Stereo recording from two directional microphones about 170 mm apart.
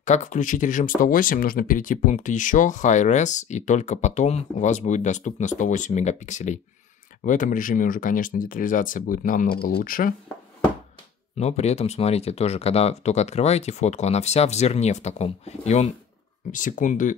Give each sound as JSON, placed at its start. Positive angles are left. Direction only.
{"t": 0.0, "sound": "speech", "side_deg": 45}
{"t": 11.3, "sound": "speech", "side_deg": 40}